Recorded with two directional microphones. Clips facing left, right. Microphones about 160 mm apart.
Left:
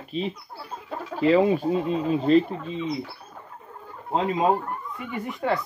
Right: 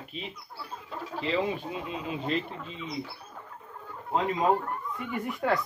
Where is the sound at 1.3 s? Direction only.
45° left (ahead or behind).